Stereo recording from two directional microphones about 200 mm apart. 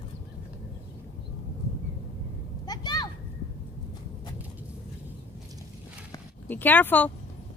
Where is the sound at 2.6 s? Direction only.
20° left (ahead or behind).